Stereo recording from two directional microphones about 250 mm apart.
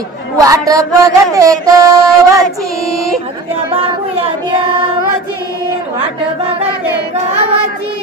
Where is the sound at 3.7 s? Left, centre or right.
Right.